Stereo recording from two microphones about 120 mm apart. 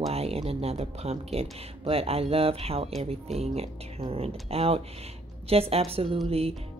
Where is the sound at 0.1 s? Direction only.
55° right (ahead or behind).